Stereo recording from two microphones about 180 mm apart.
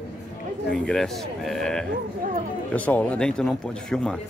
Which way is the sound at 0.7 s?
5° left (ahead or behind).